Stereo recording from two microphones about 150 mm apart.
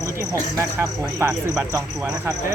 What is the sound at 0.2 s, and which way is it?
Speech, 20° right (ahead or behind).